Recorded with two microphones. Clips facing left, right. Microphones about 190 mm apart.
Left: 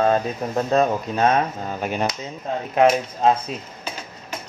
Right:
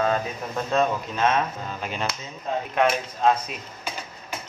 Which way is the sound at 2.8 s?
35° left (ahead or behind).